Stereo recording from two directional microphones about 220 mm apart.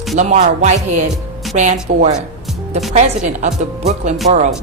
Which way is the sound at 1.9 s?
45° right (ahead or behind).